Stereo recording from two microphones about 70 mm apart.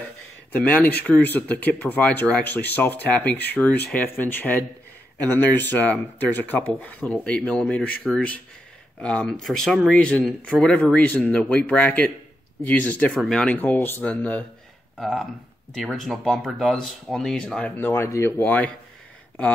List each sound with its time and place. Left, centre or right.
0.5 s speech: left
13.6 s speech: left
15.0 s speech: centre
17.7 s speech: left
18.4 s speech: left